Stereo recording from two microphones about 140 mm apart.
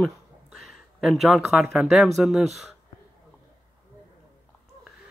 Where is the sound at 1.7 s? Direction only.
Centre (ahead or behind).